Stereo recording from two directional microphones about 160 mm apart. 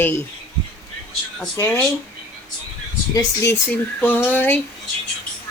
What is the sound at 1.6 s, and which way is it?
Speech, 15° left (ahead or behind).